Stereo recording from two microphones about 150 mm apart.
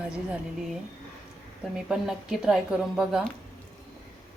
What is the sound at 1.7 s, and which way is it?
Speech, 5° right (ahead or behind).